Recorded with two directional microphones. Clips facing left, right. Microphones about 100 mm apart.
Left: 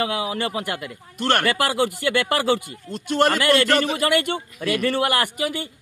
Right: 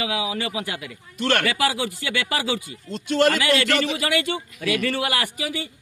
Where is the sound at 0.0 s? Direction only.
50° left (ahead or behind).